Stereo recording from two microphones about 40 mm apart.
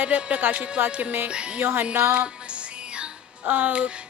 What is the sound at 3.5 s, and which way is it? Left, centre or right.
Speech, right.